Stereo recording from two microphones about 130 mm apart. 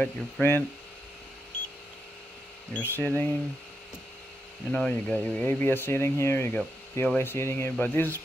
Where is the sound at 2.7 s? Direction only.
15° left (ahead or behind).